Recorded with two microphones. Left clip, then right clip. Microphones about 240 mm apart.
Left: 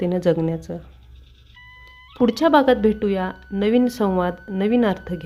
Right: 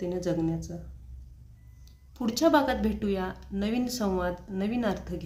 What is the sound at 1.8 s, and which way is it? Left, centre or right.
Speech, left.